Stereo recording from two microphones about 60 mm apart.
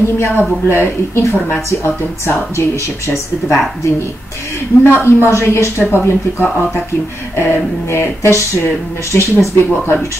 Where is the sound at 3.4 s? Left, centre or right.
Centre.